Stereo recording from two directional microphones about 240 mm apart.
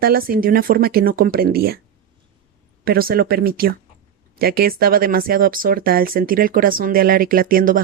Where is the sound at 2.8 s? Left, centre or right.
Right.